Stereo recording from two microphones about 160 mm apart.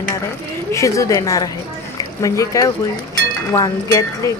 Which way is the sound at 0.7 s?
20° left (ahead or behind).